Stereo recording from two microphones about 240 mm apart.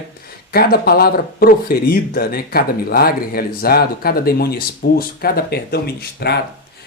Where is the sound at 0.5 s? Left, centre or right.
Left.